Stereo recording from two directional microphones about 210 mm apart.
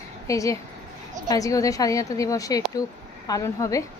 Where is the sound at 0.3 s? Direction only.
15° left (ahead or behind).